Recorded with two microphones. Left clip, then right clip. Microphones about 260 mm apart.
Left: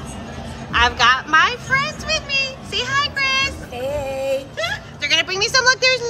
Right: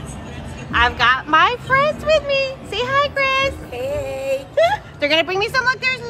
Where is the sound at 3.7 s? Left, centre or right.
Centre.